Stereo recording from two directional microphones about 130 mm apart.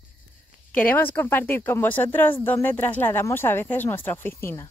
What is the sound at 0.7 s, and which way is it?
A woman's voice, 15° left (ahead or behind).